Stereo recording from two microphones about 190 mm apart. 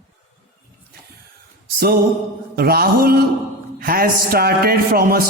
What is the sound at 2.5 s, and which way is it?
A man's voice, 55° right (ahead or behind).